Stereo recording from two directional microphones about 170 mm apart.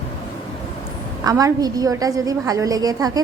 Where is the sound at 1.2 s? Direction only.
20° right (ahead or behind).